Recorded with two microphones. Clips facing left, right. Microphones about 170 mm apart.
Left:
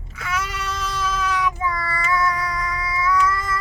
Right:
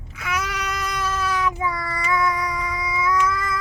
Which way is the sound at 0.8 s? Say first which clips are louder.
Left 2 dB; 15° right (ahead or behind).